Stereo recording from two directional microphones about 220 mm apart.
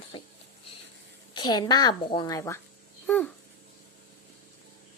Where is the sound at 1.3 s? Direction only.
20° left (ahead or behind).